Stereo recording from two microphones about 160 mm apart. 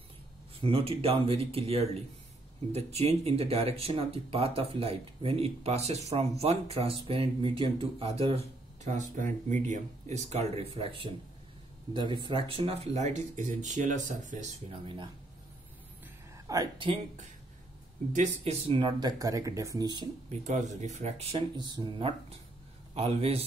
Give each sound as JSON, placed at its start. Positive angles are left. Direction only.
{"t": 0.6, "sound": "speech", "side_deg": -35}
{"t": 8.8, "sound": "speech", "side_deg": -50}
{"t": 16.4, "sound": "speech", "side_deg": -25}
{"t": 18.1, "sound": "speech", "side_deg": -45}
{"t": 20.2, "sound": "speech", "side_deg": -45}
{"t": 21.5, "sound": "speech", "side_deg": -25}